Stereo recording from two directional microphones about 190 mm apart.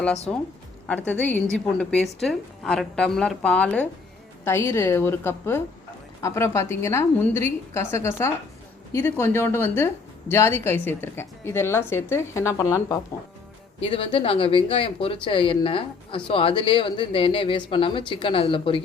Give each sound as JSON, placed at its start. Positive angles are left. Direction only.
{"t": 0.3, "sound": "a woman's voice", "side_deg": 5}
{"t": 13.8, "sound": "speech", "side_deg": 30}